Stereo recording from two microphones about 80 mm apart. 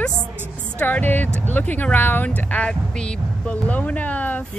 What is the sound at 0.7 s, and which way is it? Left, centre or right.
Speech, left.